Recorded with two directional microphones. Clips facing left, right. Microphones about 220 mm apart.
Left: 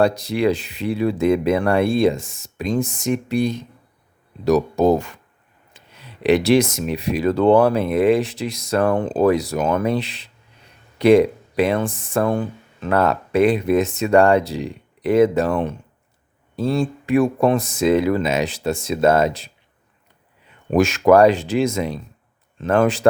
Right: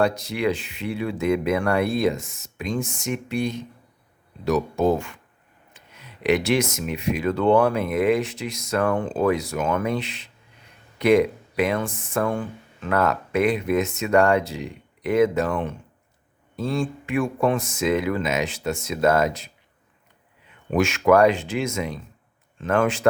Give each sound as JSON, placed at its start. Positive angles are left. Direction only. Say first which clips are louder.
{"t": 0.0, "sound": "speech", "louder": "left 4 dB", "side_deg": 35}
{"t": 20.7, "sound": "speech", "louder": "left 4 dB", "side_deg": 40}